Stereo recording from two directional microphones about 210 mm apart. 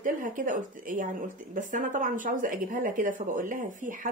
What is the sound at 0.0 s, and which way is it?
A woman's voice, 40° right (ahead or behind).